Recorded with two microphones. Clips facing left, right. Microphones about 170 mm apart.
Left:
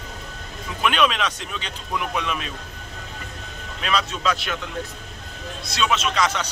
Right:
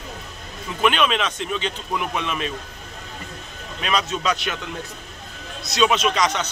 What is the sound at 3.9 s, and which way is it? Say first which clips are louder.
Speech: right 1 dB; centre (ahead or behind).